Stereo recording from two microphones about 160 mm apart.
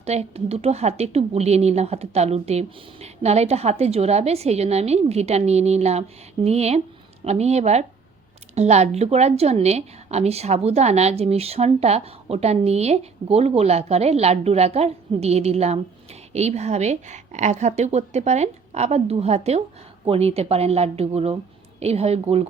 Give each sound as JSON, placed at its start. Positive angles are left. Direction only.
{"t": 0.0, "sound": "a woman's voice", "side_deg": -40}